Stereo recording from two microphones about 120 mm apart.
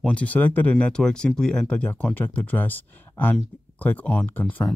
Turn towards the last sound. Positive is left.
turn(degrees=15)  # may be behind; listen again after turning